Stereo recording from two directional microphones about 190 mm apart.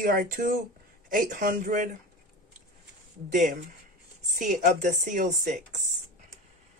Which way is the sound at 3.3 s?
40° right (ahead or behind).